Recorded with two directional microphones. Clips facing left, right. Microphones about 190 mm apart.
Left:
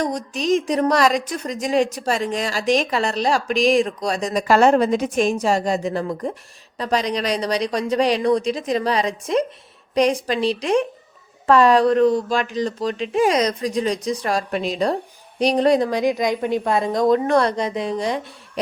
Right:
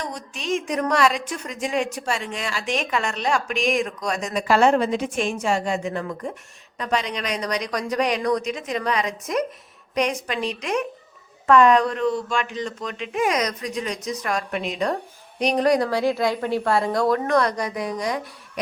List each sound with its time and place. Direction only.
0.0 s a woman's voice: 40° left (ahead or behind)